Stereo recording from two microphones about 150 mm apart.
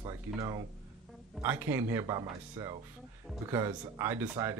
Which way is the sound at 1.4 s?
15° right (ahead or behind).